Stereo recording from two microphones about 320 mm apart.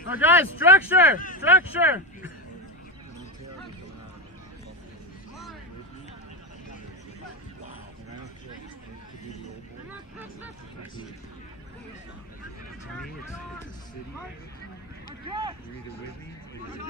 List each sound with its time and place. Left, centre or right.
0.1 s speech: centre
1.1 s speech: left
1.4 s speech: centre
15.2 s speech: centre